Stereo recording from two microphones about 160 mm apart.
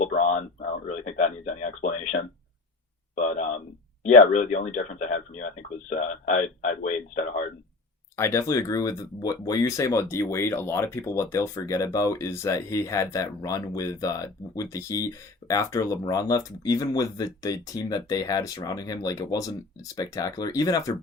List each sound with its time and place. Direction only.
0.0 s a sound: 50° left (ahead or behind)
4.0 s speech: 45° left (ahead or behind)
8.1 s speech: 15° left (ahead or behind)